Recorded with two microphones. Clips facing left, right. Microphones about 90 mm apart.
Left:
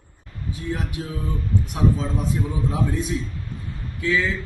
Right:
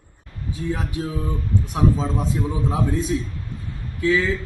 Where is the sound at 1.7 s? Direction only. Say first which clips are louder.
Right 2 dB; 30° right (ahead or behind).